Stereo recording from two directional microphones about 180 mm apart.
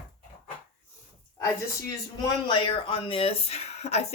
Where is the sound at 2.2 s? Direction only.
25° left (ahead or behind).